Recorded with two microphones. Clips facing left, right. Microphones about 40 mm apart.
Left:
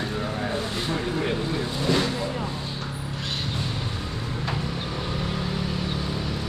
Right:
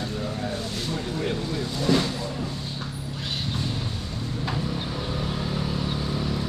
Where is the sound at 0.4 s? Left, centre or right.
Left.